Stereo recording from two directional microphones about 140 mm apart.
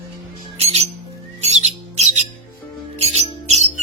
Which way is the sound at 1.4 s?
50° right (ahead or behind).